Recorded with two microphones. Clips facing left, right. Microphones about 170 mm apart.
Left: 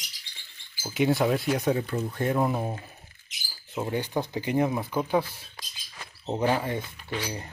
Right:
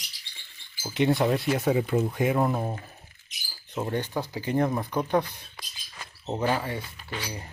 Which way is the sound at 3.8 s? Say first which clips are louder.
Left 1 dB; 10° left (ahead or behind).